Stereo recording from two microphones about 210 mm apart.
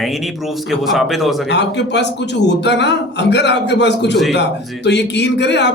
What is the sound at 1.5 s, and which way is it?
Speech, 55° left (ahead or behind).